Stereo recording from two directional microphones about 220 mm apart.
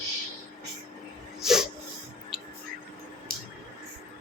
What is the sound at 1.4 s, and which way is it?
Snort, centre (ahead or behind).